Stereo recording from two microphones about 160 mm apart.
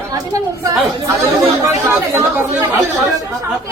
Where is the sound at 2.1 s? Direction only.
20° right (ahead or behind).